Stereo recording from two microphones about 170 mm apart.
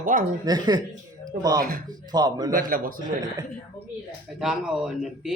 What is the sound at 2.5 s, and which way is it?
Speech, 55° right (ahead or behind).